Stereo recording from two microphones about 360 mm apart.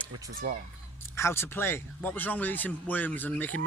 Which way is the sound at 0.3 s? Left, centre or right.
Right.